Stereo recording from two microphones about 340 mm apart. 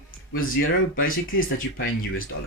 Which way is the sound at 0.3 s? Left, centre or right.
Left.